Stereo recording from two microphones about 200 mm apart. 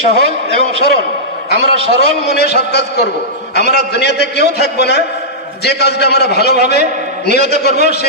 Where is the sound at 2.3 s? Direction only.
55° left (ahead or behind).